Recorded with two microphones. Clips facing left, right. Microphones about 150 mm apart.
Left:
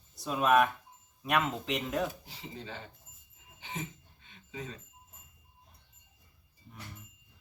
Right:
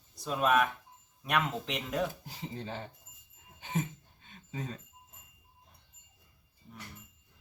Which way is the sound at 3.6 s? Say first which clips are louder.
Right 6 dB; 45° right (ahead or behind).